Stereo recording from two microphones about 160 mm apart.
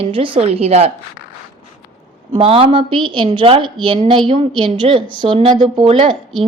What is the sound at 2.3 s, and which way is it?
A woman's voice, 35° right (ahead or behind).